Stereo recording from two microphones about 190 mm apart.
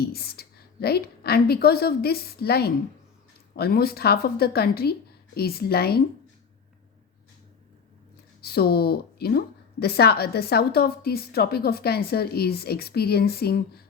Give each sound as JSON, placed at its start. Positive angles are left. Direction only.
{"t": 0.0, "sound": "a woman's voice", "side_deg": 55}
{"t": 8.4, "sound": "a woman's voice", "side_deg": 55}